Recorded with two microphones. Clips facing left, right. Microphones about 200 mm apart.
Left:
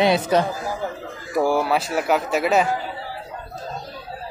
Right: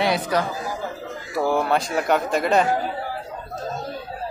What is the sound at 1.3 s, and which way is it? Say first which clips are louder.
A man's voice: left 1 dB; 10° left (ahead or behind).